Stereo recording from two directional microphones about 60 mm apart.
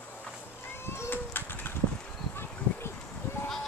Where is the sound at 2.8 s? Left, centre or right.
Left.